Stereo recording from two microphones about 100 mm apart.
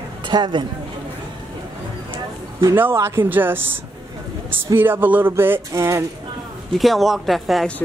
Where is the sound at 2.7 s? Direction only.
25° right (ahead or behind).